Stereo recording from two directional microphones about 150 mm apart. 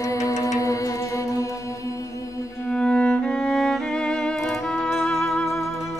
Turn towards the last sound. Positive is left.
turn(degrees=0)  # may be behind; listen again after turning